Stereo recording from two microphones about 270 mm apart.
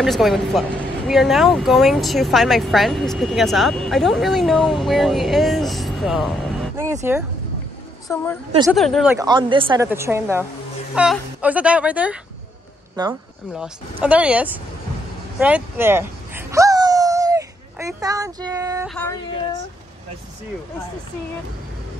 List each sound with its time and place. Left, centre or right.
0.0 s speech: centre
8.1 s speech: centre
13.0 s speech: centre
14.0 s speech: centre
15.3 s a sound: centre